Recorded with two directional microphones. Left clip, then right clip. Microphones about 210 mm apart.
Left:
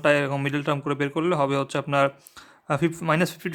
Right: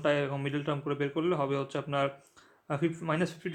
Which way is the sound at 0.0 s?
35° left (ahead or behind).